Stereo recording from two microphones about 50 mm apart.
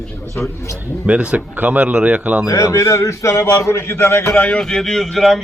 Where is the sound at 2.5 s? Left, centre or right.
Left.